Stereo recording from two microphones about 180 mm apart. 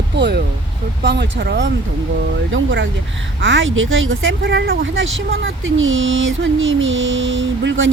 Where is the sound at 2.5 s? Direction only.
90° right.